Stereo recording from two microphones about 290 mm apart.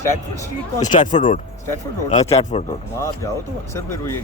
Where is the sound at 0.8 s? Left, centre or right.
Left.